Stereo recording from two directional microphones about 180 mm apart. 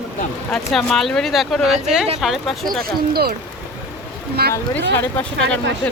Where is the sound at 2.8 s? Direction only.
60° right (ahead or behind).